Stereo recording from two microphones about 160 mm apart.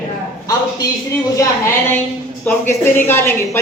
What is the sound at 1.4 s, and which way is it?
Speech, 15° left (ahead or behind).